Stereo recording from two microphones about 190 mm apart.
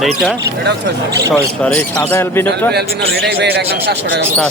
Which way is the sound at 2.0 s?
10° left (ahead or behind).